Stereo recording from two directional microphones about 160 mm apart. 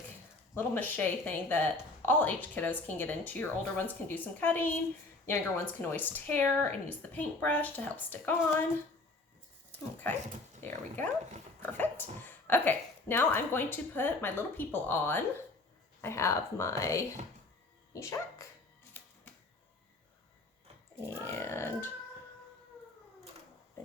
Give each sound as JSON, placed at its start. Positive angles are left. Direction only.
{"t": 0.5, "sound": "speech", "side_deg": 15}
{"t": 10.6, "sound": "speech", "side_deg": 10}
{"t": 19.0, "sound": "typewriter", "side_deg": 10}
{"t": 21.2, "sound": "speech", "side_deg": 15}